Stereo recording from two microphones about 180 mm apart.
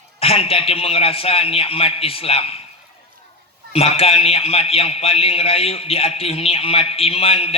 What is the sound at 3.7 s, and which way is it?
A man's voice, 35° left (ahead or behind).